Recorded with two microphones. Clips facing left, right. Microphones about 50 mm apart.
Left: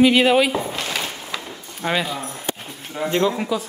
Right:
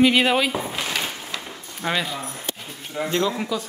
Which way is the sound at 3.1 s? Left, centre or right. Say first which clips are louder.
Left 4 dB; centre.